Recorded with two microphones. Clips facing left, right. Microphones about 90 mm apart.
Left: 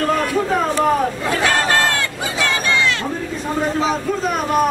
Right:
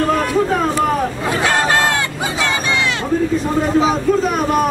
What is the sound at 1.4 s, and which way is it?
Battle cry, 15° right (ahead or behind).